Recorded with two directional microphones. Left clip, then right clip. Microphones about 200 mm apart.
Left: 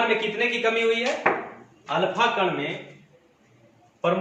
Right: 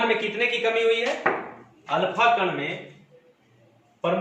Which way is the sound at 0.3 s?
10° left (ahead or behind).